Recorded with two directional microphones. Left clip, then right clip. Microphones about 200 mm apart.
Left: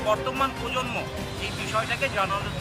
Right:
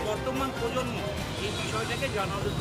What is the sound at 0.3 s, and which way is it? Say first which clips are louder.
Speech: left 3 dB; 10° right (ahead or behind).